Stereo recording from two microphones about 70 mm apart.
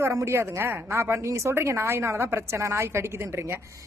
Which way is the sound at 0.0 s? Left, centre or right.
Right.